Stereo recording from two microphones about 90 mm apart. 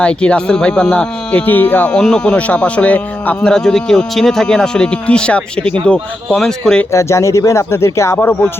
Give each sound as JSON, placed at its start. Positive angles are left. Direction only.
{"t": 0.0, "sound": "speech", "side_deg": 10}
{"t": 2.0, "sound": "speech", "side_deg": 10}
{"t": 6.9, "sound": "speech", "side_deg": 30}